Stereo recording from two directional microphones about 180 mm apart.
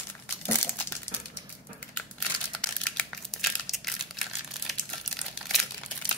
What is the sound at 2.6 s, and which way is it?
Crumpling, 5° left (ahead or behind).